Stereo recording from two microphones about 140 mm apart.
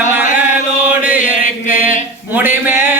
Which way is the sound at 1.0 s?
10° right (ahead or behind).